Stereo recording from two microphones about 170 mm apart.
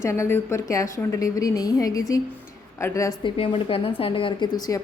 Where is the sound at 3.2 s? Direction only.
35° left (ahead or behind).